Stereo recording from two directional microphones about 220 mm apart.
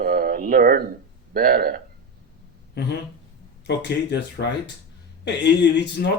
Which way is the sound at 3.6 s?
50° left (ahead or behind).